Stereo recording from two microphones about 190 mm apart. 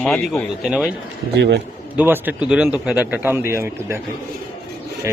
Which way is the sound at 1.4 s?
65° right (ahead or behind).